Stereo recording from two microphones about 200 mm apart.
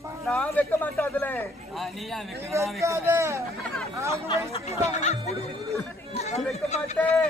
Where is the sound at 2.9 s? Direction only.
15° right (ahead or behind).